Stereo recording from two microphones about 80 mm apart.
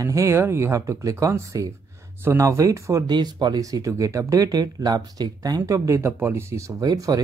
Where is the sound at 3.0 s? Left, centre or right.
Right.